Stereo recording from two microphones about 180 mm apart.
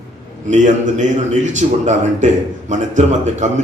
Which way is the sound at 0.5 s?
40° right (ahead or behind).